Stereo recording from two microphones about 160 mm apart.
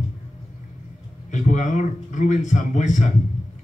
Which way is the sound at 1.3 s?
50° left (ahead or behind).